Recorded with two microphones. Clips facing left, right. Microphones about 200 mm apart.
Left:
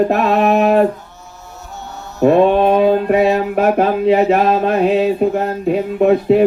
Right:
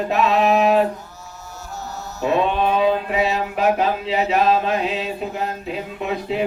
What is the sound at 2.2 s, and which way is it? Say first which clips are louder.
Mantra: left 9 dB; 55° left (ahead or behind).